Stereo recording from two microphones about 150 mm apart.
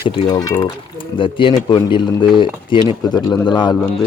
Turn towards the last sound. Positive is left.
turn(degrees=30)  # may be behind; listen again after turning